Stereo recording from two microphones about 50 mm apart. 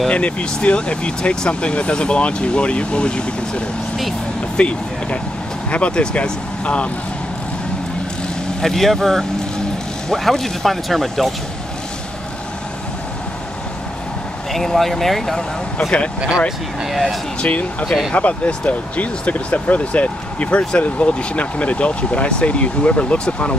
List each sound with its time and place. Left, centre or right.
0.1 s speech: left
8.5 s speech: centre
14.5 s speech: centre
16.2 s speech: centre
16.4 s speech: centre
17.4 s speech: left